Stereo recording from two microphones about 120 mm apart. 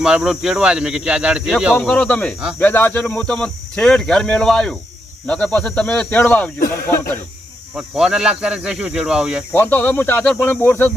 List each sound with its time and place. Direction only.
0.0 s speech: 5° right (ahead or behind)
1.7 s speech: 10° left (ahead or behind)
7.8 s speech: 5° right (ahead or behind)
9.5 s speech: 15° left (ahead or behind)